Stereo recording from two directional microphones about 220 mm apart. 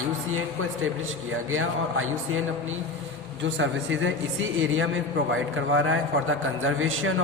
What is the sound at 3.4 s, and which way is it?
A man's voice, 55° right (ahead or behind).